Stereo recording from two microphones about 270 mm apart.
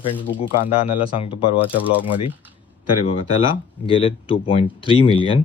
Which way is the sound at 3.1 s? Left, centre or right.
Left.